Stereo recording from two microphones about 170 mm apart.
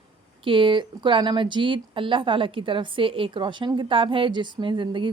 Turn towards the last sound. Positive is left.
turn(degrees=-30)  # may be behind; listen again after turning